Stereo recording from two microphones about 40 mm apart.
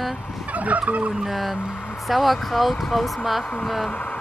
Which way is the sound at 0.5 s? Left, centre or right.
Right.